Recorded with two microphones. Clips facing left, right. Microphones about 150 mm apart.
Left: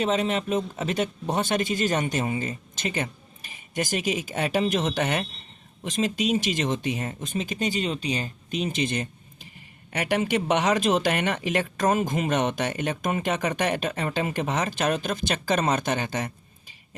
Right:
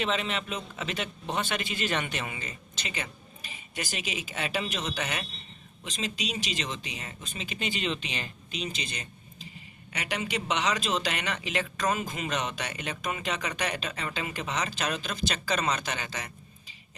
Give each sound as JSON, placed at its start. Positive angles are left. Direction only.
{"t": 0.0, "sound": "speech", "side_deg": 45}